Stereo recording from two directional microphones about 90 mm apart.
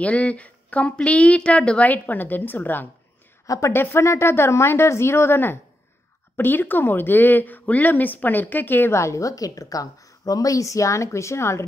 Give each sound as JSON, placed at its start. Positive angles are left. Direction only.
{"t": 0.0, "sound": "a woman's voice", "side_deg": 15}
{"t": 3.4, "sound": "a woman's voice", "side_deg": 40}
{"t": 3.7, "sound": "speech", "side_deg": 25}